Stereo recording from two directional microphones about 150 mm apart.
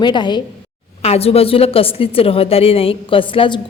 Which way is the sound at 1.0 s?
40° left (ahead or behind).